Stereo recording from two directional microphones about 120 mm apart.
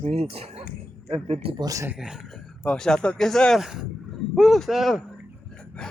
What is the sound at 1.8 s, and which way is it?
Speech, 5° right (ahead or behind).